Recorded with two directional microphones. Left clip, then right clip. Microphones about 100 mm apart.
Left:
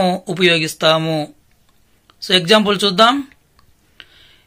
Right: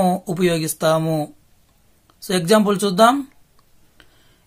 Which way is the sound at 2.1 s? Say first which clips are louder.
Left 8 dB; 40° right (ahead or behind).